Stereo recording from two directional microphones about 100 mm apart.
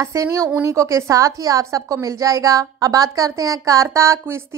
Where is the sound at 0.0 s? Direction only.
30° right (ahead or behind).